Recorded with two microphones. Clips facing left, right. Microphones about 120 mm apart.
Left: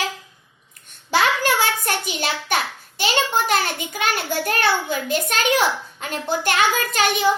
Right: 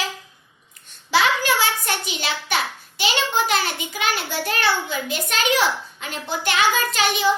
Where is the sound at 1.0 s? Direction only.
50° left (ahead or behind).